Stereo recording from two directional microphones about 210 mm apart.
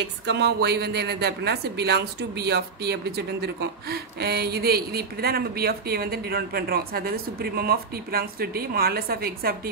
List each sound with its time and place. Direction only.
0.0 s speech: 55° right (ahead or behind)